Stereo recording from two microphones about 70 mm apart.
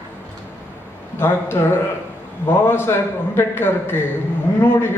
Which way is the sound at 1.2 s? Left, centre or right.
Left.